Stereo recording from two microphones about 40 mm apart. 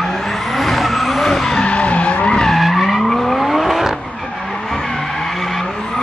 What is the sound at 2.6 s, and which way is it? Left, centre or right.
Vehicle, centre.